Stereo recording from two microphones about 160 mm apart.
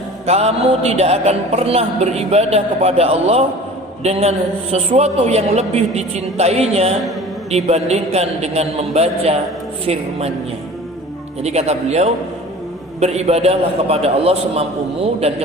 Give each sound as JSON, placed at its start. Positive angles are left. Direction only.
{"t": 0.3, "sound": "music", "side_deg": -40}
{"t": 11.4, "sound": "speech", "side_deg": -40}
{"t": 13.0, "sound": "music", "side_deg": -40}